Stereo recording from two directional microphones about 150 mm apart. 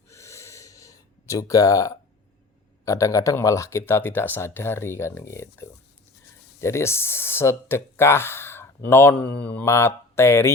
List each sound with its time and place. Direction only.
0.1 s gasp: 20° left (ahead or behind)
2.8 s speech: 20° left (ahead or behind)